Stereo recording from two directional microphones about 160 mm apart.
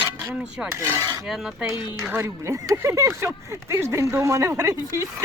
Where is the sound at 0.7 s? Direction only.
15° right (ahead or behind).